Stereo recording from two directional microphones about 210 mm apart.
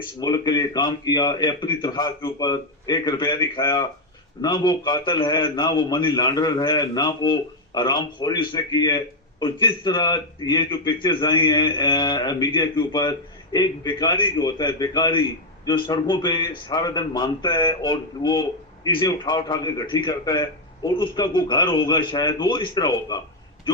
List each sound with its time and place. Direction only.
0.2 s a man's voice: 20° left (ahead or behind)